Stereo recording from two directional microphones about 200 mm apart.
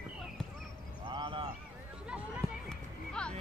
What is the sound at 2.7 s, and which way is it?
Music, 5° left (ahead or behind).